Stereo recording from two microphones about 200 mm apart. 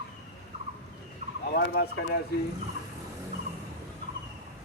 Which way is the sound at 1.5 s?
50° left (ahead or behind).